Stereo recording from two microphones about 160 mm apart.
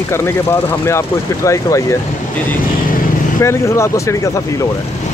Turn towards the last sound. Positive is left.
turn(degrees=15)  # may be behind; listen again after turning